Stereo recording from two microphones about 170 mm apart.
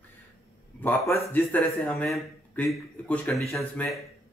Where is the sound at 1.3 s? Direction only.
10° left (ahead or behind).